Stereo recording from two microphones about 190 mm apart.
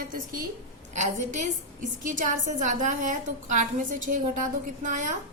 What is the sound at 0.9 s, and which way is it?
A woman's voice, 40° right (ahead or behind).